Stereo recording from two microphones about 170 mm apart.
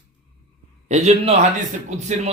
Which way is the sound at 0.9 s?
40° right (ahead or behind).